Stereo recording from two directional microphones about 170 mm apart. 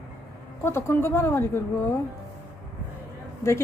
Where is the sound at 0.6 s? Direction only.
15° left (ahead or behind).